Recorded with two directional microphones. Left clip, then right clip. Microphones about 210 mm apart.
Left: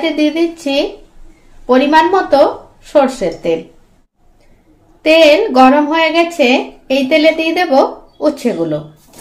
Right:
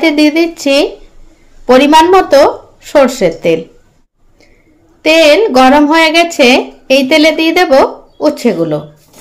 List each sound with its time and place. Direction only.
0.0 s speech: 35° right (ahead or behind)
5.0 s speech: 25° right (ahead or behind)